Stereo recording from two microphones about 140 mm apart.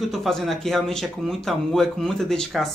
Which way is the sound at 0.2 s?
Centre (ahead or behind).